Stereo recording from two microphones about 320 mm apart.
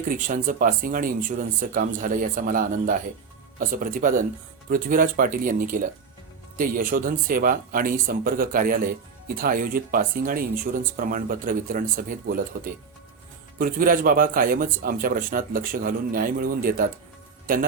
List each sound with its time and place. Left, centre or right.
0.1 s speech: right